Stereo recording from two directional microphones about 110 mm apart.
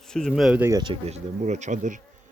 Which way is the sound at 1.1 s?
90° right.